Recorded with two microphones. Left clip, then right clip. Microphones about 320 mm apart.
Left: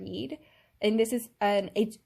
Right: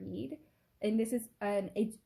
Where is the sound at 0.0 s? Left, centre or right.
Left.